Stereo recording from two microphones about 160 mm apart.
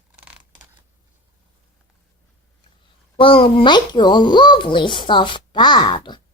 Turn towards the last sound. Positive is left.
turn(degrees=30)  # may be behind; listen again after turning